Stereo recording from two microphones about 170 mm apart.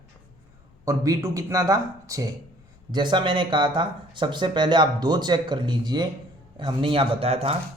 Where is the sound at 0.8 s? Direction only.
20° right (ahead or behind).